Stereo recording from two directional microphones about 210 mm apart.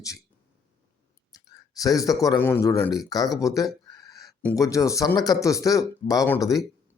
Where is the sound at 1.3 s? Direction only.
15° left (ahead or behind).